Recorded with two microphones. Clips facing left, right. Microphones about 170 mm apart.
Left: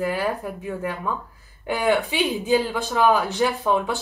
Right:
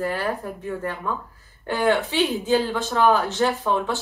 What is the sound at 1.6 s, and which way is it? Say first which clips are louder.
Speech: even; 15° left (ahead or behind).